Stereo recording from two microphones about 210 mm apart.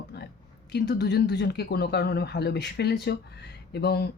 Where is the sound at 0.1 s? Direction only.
50° left (ahead or behind).